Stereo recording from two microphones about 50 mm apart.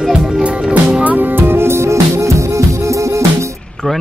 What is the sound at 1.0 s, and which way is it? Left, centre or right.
Music, right.